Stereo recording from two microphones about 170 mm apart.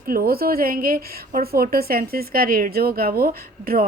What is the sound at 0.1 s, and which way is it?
A woman's voice, 60° right (ahead or behind).